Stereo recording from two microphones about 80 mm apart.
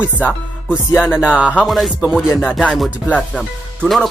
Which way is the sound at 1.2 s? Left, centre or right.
Centre.